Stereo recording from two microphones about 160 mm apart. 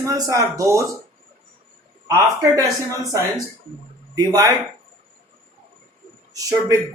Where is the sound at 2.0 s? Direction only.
20° right (ahead or behind).